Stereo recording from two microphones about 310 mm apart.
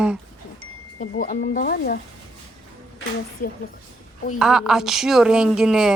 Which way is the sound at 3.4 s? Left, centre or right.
Left.